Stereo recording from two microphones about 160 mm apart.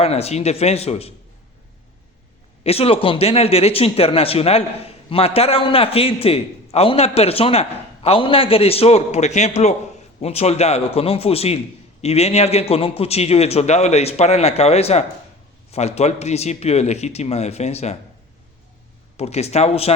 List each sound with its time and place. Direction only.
0.0 s speech: 40° left (ahead or behind)
2.6 s speech: 40° left (ahead or behind)
19.1 s speech: 40° left (ahead or behind)